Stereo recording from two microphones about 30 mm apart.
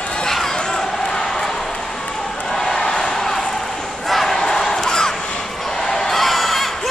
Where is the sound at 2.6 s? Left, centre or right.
Centre.